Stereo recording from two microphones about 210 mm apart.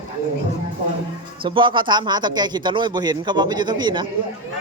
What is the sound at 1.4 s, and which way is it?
Speech, 25° right (ahead or behind).